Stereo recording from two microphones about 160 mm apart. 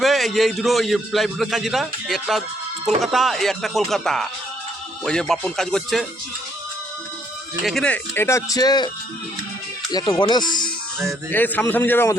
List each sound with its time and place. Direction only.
0.0 s speech: centre (ahead or behind)
7.6 s speech: centre (ahead or behind); by 8.9 s 25° left (ahead or behind)
9.9 s speech: 25° left (ahead or behind)
11.3 s speech: 10° left (ahead or behind)